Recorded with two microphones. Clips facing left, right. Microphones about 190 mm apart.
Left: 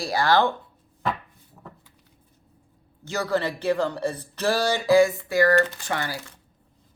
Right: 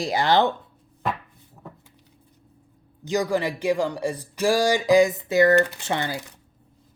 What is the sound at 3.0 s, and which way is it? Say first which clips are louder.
Speech: right 2 dB; 15° right (ahead or behind).